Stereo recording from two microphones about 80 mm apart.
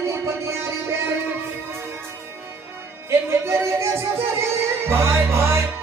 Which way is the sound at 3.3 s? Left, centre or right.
Right.